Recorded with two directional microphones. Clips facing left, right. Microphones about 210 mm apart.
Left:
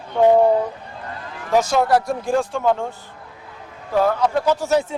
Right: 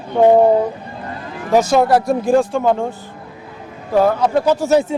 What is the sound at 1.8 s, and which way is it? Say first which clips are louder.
A man's voice: right 4 dB; 10° right (ahead or behind).